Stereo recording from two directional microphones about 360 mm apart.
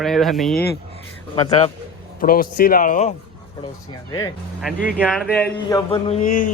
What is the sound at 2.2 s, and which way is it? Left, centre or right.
Speech, left.